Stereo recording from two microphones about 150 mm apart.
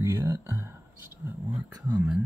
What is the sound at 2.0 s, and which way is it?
Speech, 5° right (ahead or behind).